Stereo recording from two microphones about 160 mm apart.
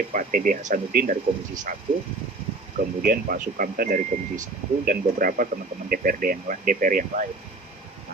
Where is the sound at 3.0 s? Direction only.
60° right (ahead or behind).